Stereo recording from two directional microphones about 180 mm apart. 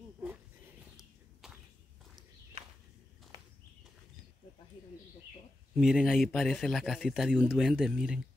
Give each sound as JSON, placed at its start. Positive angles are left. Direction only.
{"t": 1.4, "sound": "walk", "side_deg": 0}
{"t": 5.8, "sound": "speech", "side_deg": -5}